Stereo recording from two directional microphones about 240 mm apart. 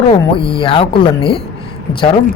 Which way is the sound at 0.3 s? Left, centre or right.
Left.